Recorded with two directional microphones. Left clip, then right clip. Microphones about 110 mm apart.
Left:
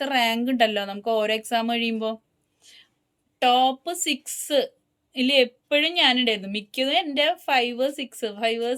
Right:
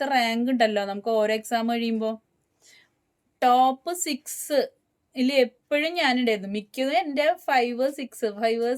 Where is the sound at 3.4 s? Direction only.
40° right (ahead or behind).